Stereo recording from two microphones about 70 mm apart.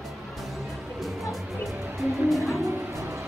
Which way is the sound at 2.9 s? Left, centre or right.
Right.